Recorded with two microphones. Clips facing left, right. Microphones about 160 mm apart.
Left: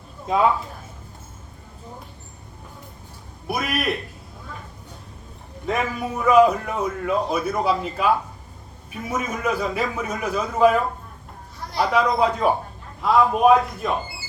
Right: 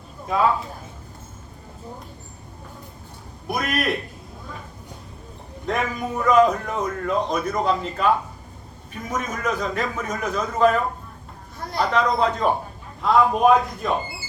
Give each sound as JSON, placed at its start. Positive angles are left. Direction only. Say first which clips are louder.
{"t": 0.3, "sound": "speech", "louder": "left 2 dB", "side_deg": 20}
{"t": 3.4, "sound": "a man's voice", "louder": "even", "side_deg": 5}
{"t": 5.6, "sound": "a man's voice", "louder": "even", "side_deg": 5}